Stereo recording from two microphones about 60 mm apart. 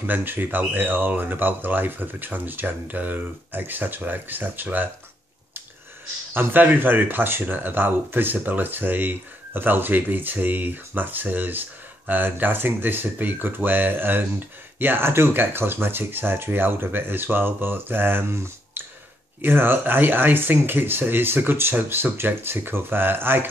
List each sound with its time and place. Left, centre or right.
0.0 s speech: right
6.3 s speech: right